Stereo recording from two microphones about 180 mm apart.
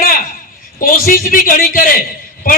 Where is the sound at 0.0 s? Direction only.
55° left (ahead or behind).